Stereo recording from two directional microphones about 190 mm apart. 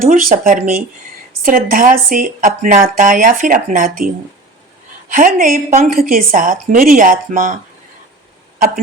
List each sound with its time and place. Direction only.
0.0 s speech: 45° right (ahead or behind)